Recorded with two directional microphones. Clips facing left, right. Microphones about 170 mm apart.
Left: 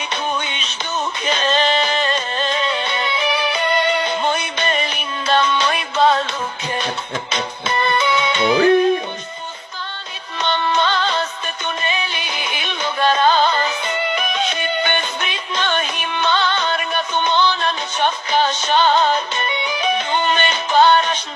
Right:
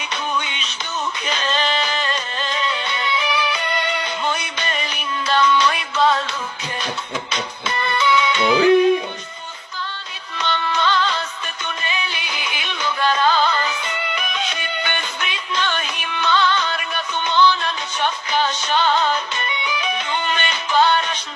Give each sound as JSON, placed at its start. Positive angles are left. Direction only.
{"t": 0.1, "sound": "music", "side_deg": 25}
{"t": 7.3, "sound": "music", "side_deg": 25}
{"t": 10.4, "sound": "music", "side_deg": 25}